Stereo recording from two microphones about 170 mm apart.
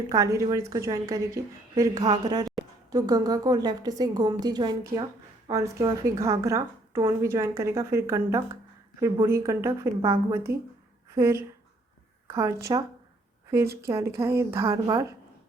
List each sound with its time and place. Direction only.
0.1 s a woman's voice: 20° right (ahead or behind)
13.8 s a woman's voice: 15° right (ahead or behind)